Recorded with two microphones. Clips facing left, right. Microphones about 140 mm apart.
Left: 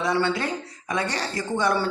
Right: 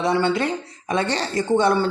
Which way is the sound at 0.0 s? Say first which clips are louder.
Right 4 dB; 20° right (ahead or behind).